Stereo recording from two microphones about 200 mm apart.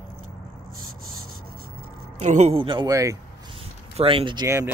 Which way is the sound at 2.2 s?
35° right (ahead or behind).